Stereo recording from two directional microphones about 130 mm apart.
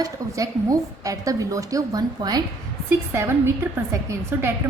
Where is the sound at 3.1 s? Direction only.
20° right (ahead or behind).